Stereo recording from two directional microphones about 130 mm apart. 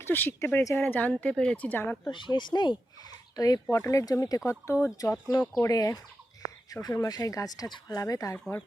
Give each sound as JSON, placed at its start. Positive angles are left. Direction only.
{"t": 0.0, "sound": "speech", "side_deg": 15}
{"t": 2.0, "sound": "speech", "side_deg": 35}
{"t": 6.8, "sound": "speech", "side_deg": 25}